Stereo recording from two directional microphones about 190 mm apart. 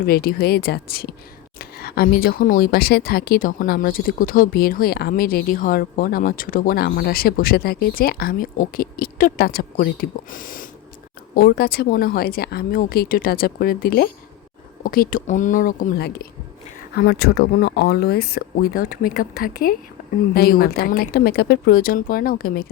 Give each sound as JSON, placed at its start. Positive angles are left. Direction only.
{"t": 0.0, "sound": "speech", "side_deg": 55}